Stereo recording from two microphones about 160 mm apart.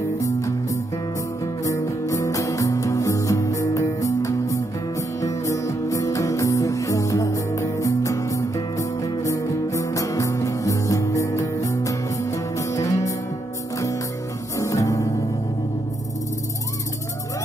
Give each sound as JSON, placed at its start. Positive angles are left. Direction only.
{"t": 0.2, "sound": "music", "side_deg": 20}
{"t": 14.6, "sound": "music", "side_deg": 20}